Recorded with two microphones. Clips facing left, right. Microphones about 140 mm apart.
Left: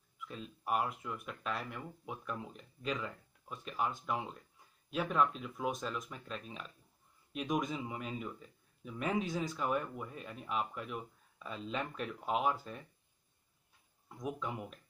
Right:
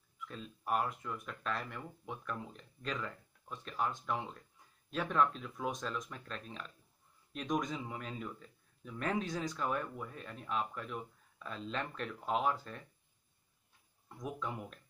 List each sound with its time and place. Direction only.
0.3 s a man's voice: 5° left (ahead or behind)
14.0 s speech: 5° left (ahead or behind)